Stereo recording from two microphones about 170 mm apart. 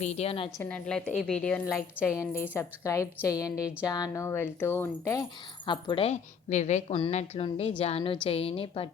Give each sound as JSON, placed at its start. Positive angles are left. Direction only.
{"t": 0.0, "sound": "a woman's voice", "side_deg": 40}
{"t": 0.6, "sound": "a woman's voice", "side_deg": 5}
{"t": 1.6, "sound": "a woman's voice", "side_deg": 15}
{"t": 5.6, "sound": "a woman's voice", "side_deg": 25}